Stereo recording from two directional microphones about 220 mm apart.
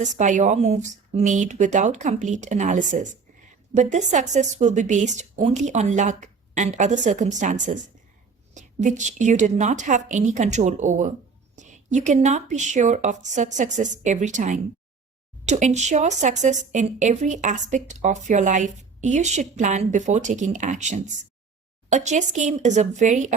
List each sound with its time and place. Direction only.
0.0 s a woman's voice: 35° right (ahead or behind)